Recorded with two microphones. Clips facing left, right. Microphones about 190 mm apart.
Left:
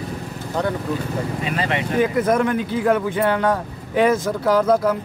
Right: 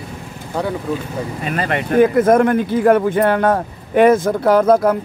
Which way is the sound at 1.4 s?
50° right (ahead or behind).